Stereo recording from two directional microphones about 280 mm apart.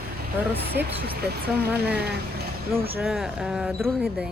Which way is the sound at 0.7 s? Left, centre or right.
Right.